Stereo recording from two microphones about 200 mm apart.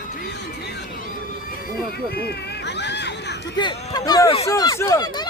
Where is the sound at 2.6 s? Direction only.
60° left (ahead or behind).